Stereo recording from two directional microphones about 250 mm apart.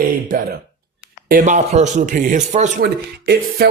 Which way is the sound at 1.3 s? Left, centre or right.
Right.